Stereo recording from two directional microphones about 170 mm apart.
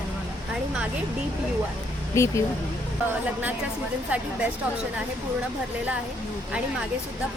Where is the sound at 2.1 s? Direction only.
15° left (ahead or behind).